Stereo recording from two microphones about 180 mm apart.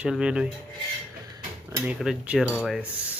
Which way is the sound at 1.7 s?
15° right (ahead or behind).